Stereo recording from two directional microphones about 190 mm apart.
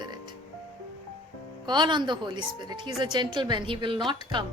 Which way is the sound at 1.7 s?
25° right (ahead or behind).